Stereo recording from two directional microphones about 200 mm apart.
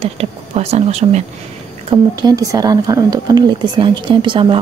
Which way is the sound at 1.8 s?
20° right (ahead or behind).